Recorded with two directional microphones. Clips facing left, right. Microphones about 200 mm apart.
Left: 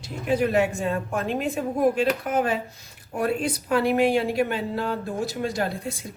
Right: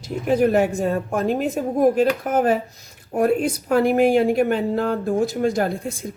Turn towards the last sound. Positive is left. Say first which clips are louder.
# right 5 dB
turn(degrees=-50)  # may be behind; listen again after turning